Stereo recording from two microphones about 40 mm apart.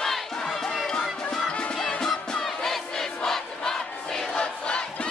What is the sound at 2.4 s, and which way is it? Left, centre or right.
Crowd, centre.